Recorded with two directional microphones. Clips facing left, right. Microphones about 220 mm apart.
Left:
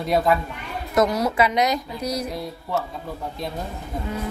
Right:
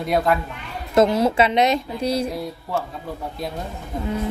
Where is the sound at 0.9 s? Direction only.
25° right (ahead or behind).